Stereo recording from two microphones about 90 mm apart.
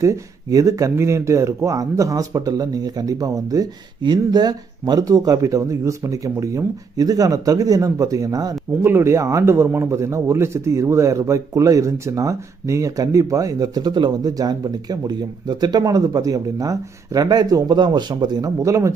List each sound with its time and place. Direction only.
0.0 s a man's voice: 40° right (ahead or behind)
4.0 s a man's voice: 55° right (ahead or behind)
8.8 s a man's voice: 30° right (ahead or behind); by 18.5 s 55° right (ahead or behind)
18.6 s a man's voice: 35° right (ahead or behind)